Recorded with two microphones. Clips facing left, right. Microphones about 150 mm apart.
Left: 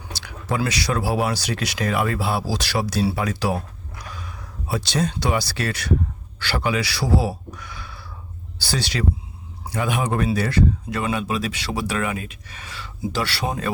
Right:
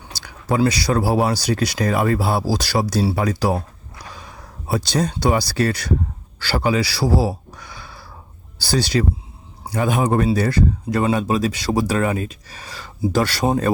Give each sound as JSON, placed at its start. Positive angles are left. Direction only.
{"t": 0.2, "sound": "a man's voice", "side_deg": -35}